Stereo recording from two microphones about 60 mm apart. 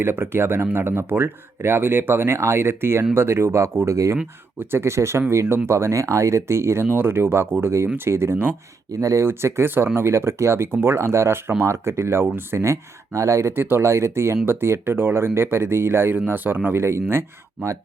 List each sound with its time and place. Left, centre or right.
0.0 s speech: right
4.6 s speech: right
6.8 s speech: right
8.9 s speech: right
9.2 s speech: right
13.5 s speech: right